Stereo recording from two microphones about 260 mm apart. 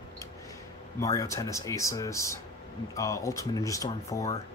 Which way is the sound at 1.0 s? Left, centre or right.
Centre.